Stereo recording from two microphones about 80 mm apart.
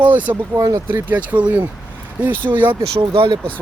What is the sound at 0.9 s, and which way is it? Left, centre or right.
Speech, centre.